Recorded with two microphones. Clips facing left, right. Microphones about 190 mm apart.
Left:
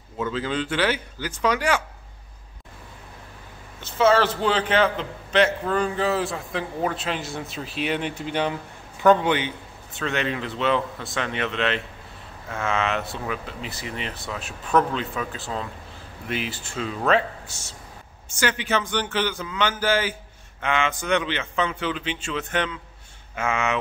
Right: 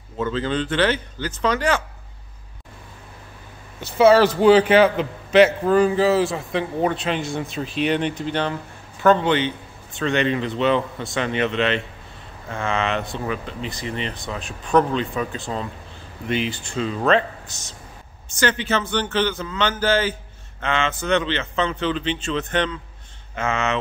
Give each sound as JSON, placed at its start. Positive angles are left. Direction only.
{"t": 0.2, "sound": "a man's voice", "side_deg": 5}
{"t": 3.8, "sound": "a man's voice", "side_deg": -10}